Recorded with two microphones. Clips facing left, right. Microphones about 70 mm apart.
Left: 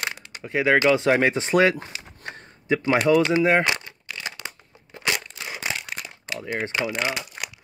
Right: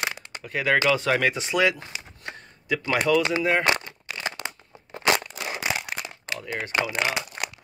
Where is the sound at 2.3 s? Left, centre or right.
Left.